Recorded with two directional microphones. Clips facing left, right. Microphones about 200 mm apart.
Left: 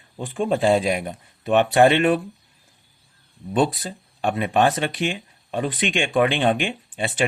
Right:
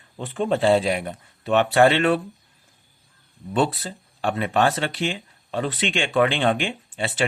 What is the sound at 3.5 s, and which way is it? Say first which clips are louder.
Speech: left 1 dB; 15° left (ahead or behind).